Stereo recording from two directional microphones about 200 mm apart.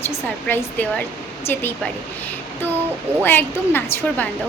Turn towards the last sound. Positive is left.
turn(degrees=10)  # may be behind; listen again after turning